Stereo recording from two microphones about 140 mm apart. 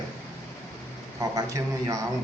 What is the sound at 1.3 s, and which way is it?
Speech, 25° right (ahead or behind).